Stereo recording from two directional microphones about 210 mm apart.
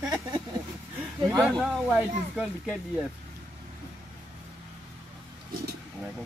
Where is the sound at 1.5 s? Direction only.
5° right (ahead or behind).